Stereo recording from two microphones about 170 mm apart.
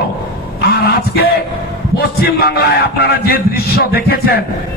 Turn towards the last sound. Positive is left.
turn(degrees=65)  # may be behind; listen again after turning